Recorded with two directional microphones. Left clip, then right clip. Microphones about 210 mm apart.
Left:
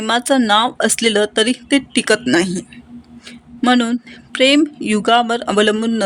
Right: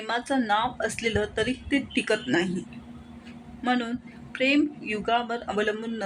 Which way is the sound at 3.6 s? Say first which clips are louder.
Left 12 dB; 50° left (ahead or behind).